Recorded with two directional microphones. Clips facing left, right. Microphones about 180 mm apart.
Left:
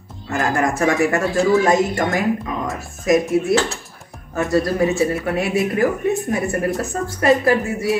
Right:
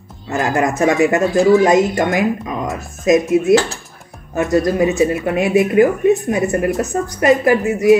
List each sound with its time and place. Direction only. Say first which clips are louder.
0.3 s speech: right 2 dB; 20° right (ahead or behind)